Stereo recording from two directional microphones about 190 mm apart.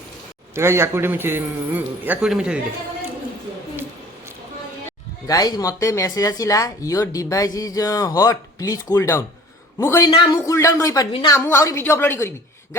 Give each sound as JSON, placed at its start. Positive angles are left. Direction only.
{"t": 0.5, "sound": "a man's voice", "side_deg": -15}
{"t": 4.9, "sound": "speech", "side_deg": 20}